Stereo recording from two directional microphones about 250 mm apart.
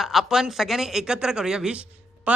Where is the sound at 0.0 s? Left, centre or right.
Centre.